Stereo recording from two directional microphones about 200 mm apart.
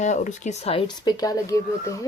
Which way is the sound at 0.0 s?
35° left (ahead or behind).